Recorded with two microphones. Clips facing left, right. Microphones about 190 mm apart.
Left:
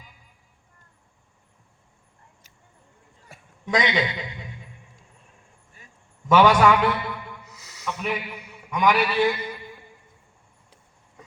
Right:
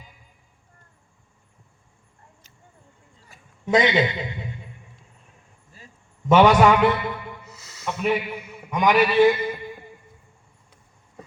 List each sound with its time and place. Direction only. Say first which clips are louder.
3.7 s a man's voice: right 4 dB; 25° right (ahead or behind)
6.3 s a man's voice: right 2 dB; 25° right (ahead or behind)
7.4 s a sound: right 1 dB; 15° left (ahead or behind)
8.0 s a man's voice: right 8 dB; 25° right (ahead or behind)